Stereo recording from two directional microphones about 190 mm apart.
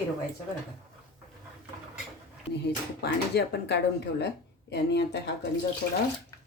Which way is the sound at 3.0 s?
60° left (ahead or behind).